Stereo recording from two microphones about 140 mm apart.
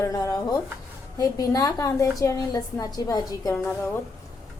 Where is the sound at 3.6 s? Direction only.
10° left (ahead or behind).